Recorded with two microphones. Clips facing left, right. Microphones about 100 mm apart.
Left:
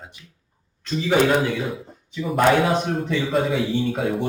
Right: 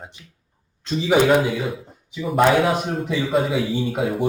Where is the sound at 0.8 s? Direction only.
15° right (ahead or behind).